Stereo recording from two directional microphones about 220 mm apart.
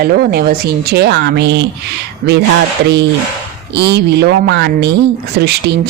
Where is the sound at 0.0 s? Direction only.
45° right (ahead or behind).